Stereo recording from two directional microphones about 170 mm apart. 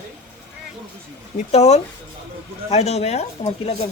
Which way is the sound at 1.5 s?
40° left (ahead or behind).